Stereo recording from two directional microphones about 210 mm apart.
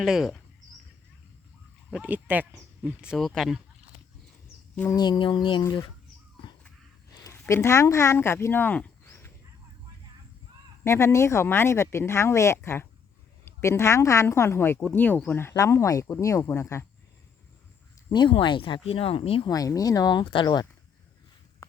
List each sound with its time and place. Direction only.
0.0 s speech: centre (ahead or behind)
1.9 s speech: 5° right (ahead or behind)
4.7 s speech: 5° left (ahead or behind)
4.9 s speech: 20° left (ahead or behind)
7.3 s speech: 15° left (ahead or behind)
10.8 s a woman's voice: 15° left (ahead or behind)
18.1 s speech: 20° left (ahead or behind)